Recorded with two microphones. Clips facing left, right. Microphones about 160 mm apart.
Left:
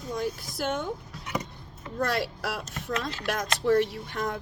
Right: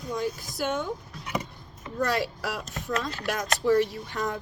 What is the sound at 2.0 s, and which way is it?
A woman's voice, 55° left (ahead or behind).